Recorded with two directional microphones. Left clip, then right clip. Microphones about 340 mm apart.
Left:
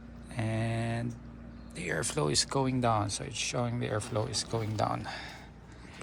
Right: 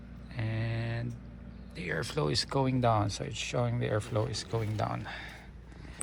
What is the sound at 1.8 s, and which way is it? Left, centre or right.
Speech, centre.